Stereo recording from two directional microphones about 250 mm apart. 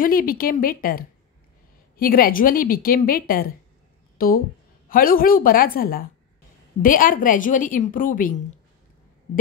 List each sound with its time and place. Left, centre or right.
0.0 s a woman's voice: left